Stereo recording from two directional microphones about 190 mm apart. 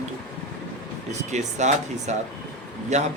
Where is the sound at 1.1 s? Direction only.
40° right (ahead or behind).